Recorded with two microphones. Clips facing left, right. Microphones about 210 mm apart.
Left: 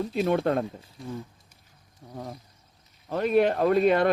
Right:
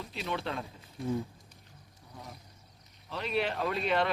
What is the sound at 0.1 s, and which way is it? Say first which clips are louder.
Speech: left 11 dB; 50° left (ahead or behind).